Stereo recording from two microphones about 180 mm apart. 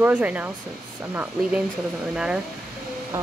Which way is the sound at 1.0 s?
5° right (ahead or behind).